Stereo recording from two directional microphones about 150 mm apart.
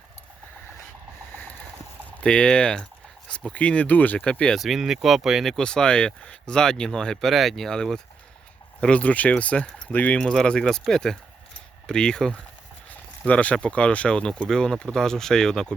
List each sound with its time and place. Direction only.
2.2 s speech: 5° left (ahead or behind)